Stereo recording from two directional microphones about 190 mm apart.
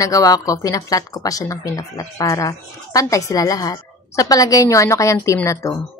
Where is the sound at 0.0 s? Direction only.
15° left (ahead or behind).